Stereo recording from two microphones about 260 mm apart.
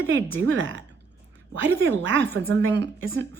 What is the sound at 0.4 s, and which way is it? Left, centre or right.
Speech, right.